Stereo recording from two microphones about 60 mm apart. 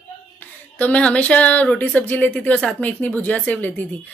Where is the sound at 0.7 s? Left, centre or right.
Left.